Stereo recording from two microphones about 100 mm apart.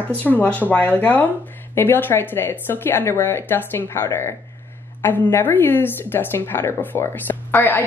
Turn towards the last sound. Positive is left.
turn(degrees=20)  # may be behind; listen again after turning